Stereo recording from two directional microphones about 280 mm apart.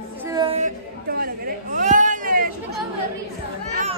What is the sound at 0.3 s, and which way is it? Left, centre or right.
Music, centre.